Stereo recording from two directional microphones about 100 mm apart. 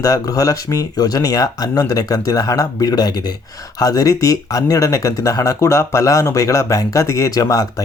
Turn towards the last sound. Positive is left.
turn(degrees=35)  # may be behind; listen again after turning